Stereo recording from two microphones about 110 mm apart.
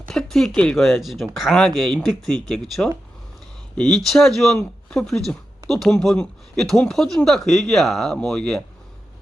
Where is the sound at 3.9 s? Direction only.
5° left (ahead or behind).